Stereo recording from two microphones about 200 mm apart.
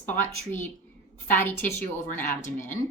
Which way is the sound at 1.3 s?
10° left (ahead or behind).